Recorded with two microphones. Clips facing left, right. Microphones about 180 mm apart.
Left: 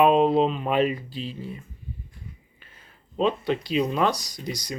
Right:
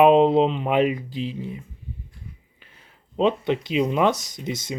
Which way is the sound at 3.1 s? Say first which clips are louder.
Right 3 dB; 20° right (ahead or behind).